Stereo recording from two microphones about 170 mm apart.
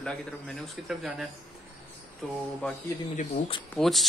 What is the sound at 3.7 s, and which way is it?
Speech, centre (ahead or behind).